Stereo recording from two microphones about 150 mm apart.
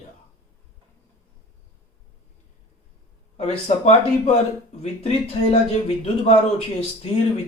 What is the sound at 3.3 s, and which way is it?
Speech, 45° left (ahead or behind).